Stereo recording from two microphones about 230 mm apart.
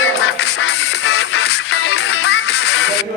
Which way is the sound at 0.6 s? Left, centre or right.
Left.